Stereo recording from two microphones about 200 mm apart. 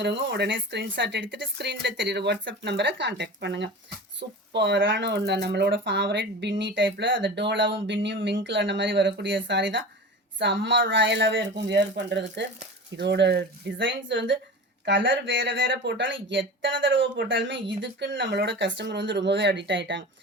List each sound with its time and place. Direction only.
0.0 s speech: 60° right (ahead or behind)